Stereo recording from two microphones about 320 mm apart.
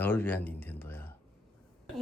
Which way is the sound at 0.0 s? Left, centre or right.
Centre.